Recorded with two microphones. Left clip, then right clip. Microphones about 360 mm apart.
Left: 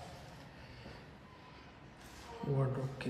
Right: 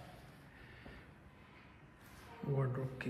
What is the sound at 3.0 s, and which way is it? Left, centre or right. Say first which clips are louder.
Speech: left 2 dB; centre.